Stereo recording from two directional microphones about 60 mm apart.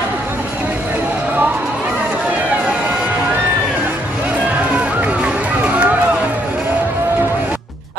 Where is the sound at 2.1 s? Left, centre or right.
Right.